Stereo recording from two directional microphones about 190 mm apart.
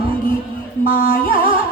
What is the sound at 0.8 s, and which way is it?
Music, 50° left (ahead or behind).